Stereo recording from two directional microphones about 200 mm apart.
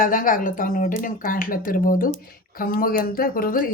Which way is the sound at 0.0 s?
40° left (ahead or behind).